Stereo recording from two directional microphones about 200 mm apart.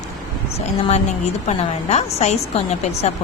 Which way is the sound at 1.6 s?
35° left (ahead or behind).